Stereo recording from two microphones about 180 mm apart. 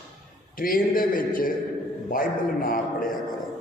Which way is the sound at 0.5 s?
50° left (ahead or behind).